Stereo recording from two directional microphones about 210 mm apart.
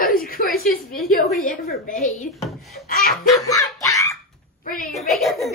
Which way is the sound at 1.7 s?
45° left (ahead or behind).